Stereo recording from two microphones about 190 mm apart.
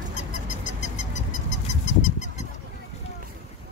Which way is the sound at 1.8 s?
40° left (ahead or behind).